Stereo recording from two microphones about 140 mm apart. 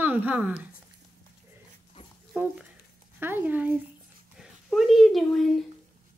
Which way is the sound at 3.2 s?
15° right (ahead or behind).